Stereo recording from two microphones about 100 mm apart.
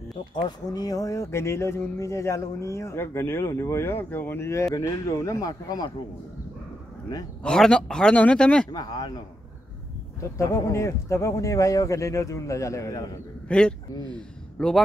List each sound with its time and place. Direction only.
0.3 s speech: 55° left (ahead or behind)
0.7 s speech: 40° left (ahead or behind)
7.4 s speech: 5° left (ahead or behind)
8.7 s speech: 40° left (ahead or behind)
10.3 s speech: 30° left (ahead or behind)
13.5 s a man's voice: 10° left (ahead or behind)